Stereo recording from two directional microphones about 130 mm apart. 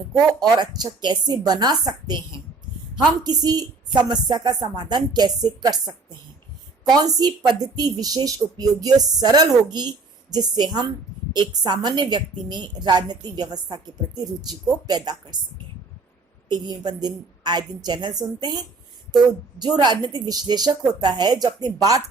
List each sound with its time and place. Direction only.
0.1 s speech: 30° right (ahead or behind)
7.2 s speech: 30° right (ahead or behind)
16.5 s speech: 35° right (ahead or behind)